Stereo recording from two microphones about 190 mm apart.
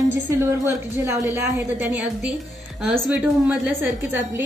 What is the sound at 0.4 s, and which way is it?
Speech, 15° right (ahead or behind).